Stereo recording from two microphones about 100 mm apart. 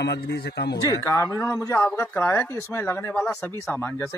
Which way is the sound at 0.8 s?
30° left (ahead or behind).